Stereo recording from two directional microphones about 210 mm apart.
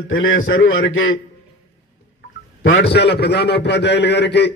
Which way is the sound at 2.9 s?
50° left (ahead or behind).